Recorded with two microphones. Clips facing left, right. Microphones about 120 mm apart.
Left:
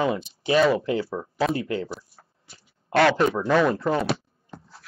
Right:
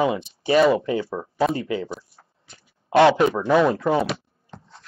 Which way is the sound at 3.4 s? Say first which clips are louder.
Right 2 dB; 15° right (ahead or behind).